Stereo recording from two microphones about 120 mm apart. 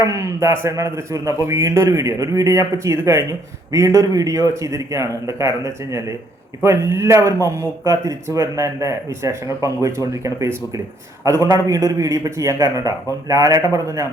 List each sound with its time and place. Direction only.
0.0 s a man's voice: 25° right (ahead or behind)